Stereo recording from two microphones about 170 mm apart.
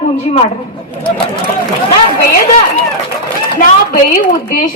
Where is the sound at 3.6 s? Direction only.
55° left (ahead or behind).